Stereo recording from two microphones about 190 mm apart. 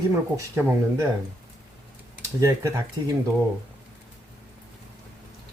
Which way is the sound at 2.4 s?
15° right (ahead or behind).